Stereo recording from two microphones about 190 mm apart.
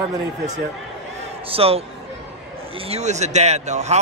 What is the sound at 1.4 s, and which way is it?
Speech, 30° right (ahead or behind).